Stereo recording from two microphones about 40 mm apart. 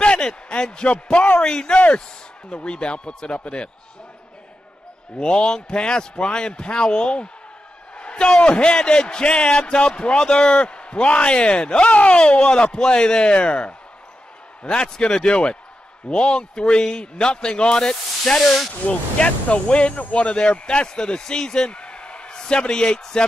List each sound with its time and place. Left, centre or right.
0.0 s a sound: left
1.1 s speech: left
1.4 s a man's voice: centre
5.2 s a man's voice: left
18.2 s speech: centre
18.7 s a man's voice: left